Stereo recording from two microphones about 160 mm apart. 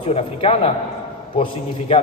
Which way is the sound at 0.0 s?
40° left (ahead or behind).